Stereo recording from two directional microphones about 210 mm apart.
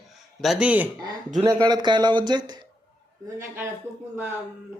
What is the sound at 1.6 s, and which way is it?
Speech, 20° right (ahead or behind).